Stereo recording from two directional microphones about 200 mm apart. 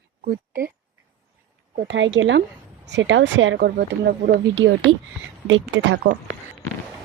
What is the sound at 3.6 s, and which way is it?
Speech, 55° right (ahead or behind).